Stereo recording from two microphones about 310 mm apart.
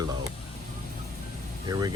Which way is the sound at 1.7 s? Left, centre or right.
Centre.